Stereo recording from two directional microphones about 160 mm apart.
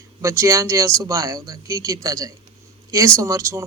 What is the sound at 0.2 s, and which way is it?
Speech, 20° right (ahead or behind).